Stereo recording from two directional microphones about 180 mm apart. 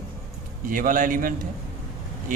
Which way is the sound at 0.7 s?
50° right (ahead or behind).